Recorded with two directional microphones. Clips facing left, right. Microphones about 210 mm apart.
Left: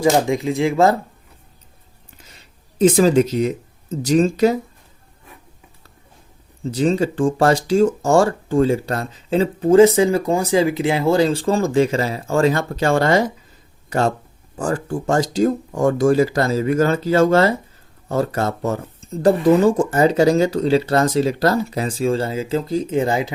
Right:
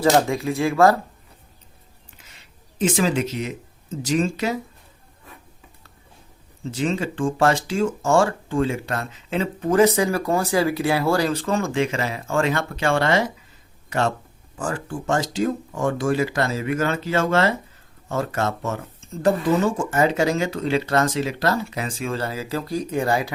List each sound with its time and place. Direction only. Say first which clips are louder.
0.0 s speech: left 2 dB; 15° left (ahead or behind)
2.3 s speech: left 2 dB; 40° left (ahead or behind)
6.7 s speech: left 6 dB; 35° left (ahead or behind)
14.5 s speech: left 6 dB; 35° left (ahead or behind); by 23.3 s 20° left (ahead or behind)